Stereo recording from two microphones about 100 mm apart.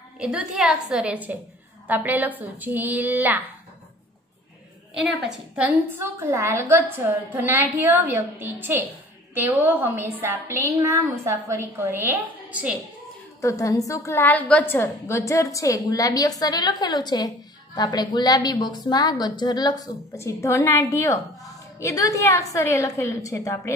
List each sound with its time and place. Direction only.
0.2 s a woman's voice: 10° right (ahead or behind)
4.9 s a woman's voice: 10° right (ahead or behind)
10.8 s a woman's voice: 35° right (ahead or behind); by 12.7 s 15° right (ahead or behind)
13.4 s a woman's voice: 30° left (ahead or behind)
14.2 s a woman's voice: 15° left (ahead or behind); by 19.9 s 40° left (ahead or behind)
20.2 s a woman's voice: 30° left (ahead or behind)